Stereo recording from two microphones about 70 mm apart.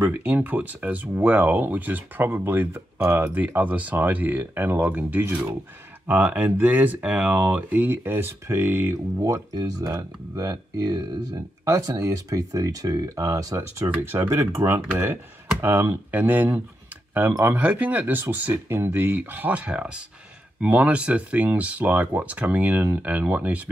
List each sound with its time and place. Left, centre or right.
0.0 s speech: right
9.2 s speech: right
13.8 s speech: right
14.3 s speech: right
15.6 s speech: right